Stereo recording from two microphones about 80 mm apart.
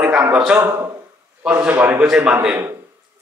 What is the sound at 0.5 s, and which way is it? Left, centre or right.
Speech, right.